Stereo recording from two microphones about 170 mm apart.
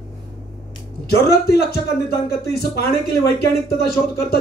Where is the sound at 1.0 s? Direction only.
65° left (ahead or behind).